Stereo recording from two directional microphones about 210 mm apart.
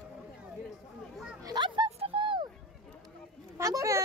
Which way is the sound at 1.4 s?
20° right (ahead or behind).